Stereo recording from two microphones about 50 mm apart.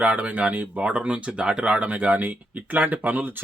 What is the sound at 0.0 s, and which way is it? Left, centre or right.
Speech, right.